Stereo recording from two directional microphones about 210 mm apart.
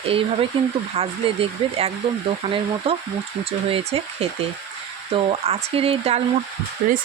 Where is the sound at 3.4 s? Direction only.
25° right (ahead or behind).